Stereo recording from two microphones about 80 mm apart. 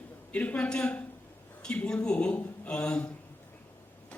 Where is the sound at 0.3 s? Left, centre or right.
Centre.